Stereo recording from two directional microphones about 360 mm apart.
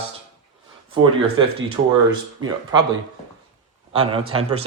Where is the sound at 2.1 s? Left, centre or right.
Centre.